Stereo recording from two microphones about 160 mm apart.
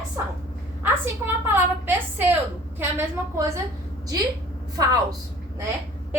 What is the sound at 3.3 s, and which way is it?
Speech, 20° right (ahead or behind).